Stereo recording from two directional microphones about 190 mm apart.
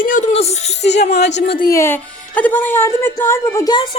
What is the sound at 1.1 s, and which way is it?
Speech, 60° left (ahead or behind).